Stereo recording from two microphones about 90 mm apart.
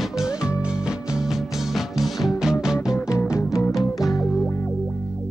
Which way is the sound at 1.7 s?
Centre (ahead or behind).